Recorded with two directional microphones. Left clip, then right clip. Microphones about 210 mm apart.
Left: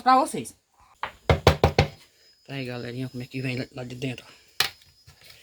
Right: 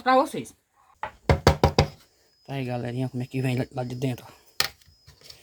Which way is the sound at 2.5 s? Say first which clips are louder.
Right 2 dB; 50° right (ahead or behind).